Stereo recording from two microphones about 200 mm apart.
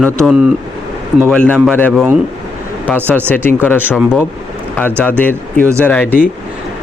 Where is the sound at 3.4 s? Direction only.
10° left (ahead or behind).